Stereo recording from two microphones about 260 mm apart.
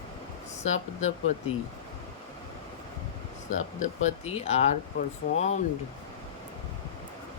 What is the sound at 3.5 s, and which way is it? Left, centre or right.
Speech, left.